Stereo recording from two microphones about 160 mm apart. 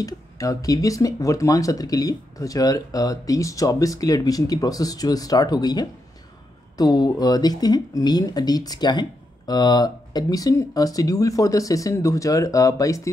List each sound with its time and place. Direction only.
0.0 s speech: 20° left (ahead or behind)